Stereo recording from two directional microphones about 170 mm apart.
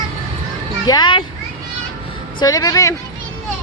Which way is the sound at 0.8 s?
25° left (ahead or behind).